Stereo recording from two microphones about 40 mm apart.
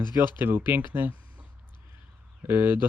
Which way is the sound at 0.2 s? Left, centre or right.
Right.